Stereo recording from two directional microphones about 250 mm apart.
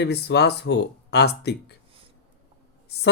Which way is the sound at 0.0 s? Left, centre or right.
Left.